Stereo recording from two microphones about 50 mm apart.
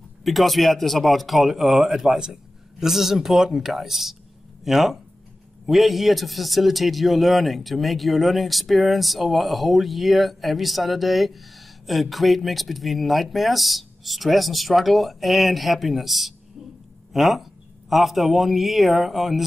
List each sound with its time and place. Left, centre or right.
0.2 s a man's voice: centre